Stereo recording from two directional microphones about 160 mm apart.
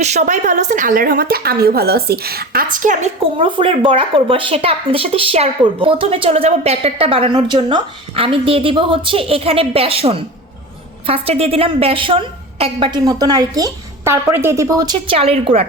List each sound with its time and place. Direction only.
0.0 s a woman's voice: 50° right (ahead or behind)
3.3 s speech: 35° right (ahead or behind)